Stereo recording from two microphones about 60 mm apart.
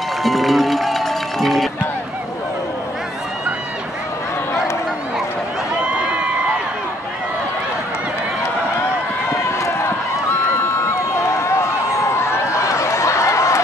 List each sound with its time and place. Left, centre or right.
0.2 s music: centre
9.3 s run: left
11.1 s a sound: left